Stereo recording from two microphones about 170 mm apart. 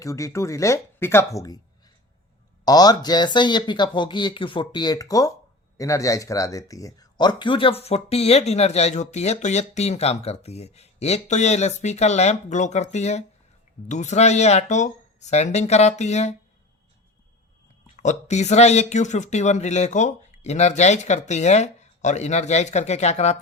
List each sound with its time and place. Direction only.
0.0 s speech: 20° left (ahead or behind); by 16.3 s 40° left (ahead or behind)
18.0 s speech: 40° left (ahead or behind)